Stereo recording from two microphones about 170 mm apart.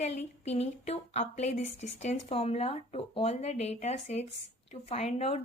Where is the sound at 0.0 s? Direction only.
40° left (ahead or behind).